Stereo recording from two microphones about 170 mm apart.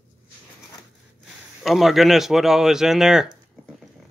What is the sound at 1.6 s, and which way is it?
A man's voice, centre (ahead or behind).